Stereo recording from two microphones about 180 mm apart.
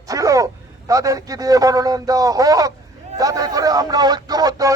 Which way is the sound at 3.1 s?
20° right (ahead or behind).